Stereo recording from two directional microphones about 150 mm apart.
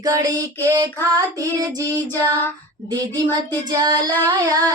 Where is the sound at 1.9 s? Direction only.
15° left (ahead or behind).